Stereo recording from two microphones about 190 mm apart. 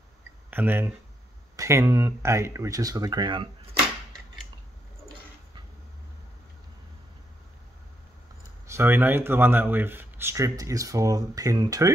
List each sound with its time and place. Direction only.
0.5 s speech: 10° right (ahead or behind)
8.6 s speech: 15° right (ahead or behind)